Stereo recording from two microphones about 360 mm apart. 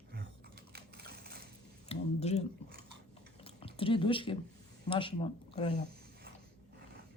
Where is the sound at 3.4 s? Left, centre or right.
Centre.